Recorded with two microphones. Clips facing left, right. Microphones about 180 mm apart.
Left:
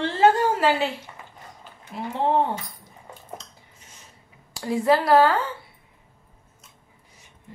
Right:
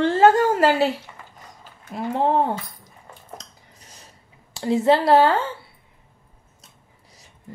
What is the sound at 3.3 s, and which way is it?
Dishes, 35° right (ahead or behind).